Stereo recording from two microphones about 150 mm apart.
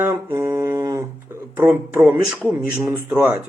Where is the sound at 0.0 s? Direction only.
15° right (ahead or behind).